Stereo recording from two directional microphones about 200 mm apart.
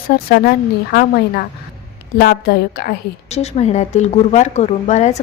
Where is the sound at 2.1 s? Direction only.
50° left (ahead or behind).